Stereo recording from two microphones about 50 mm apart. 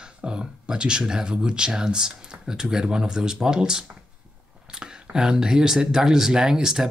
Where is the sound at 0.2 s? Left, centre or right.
Centre.